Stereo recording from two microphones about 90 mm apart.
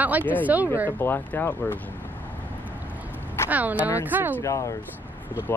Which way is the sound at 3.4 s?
20° right (ahead or behind).